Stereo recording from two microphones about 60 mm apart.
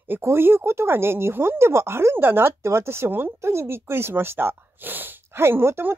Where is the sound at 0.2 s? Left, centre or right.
Right.